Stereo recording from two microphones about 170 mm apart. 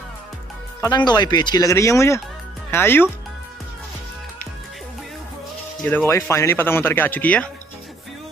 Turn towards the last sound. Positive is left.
turn(degrees=10)  # may be behind; listen again after turning